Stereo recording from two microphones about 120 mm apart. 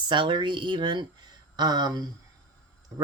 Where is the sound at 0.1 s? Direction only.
40° right (ahead or behind).